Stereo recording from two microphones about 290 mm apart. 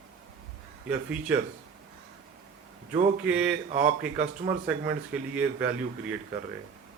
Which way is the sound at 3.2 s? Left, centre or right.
Centre.